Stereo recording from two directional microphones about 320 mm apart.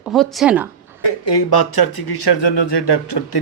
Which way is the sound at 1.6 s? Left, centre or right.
Left.